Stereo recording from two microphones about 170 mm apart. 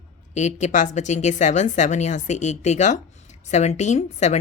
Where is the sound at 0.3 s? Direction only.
45° left (ahead or behind).